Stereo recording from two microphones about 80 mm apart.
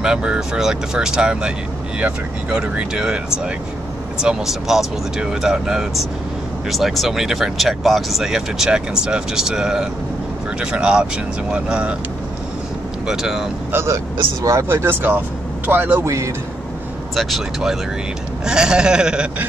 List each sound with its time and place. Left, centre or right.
0.0 s speech: centre
13.0 s speech: centre
13.7 s speech: right
17.1 s speech: centre